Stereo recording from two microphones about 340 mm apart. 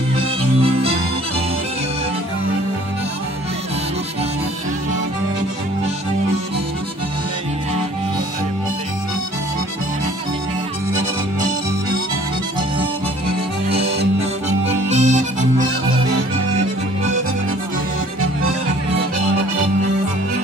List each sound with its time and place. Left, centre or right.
13.7 s music: centre